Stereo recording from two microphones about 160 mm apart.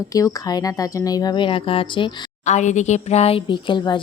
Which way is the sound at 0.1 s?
20° left (ahead or behind).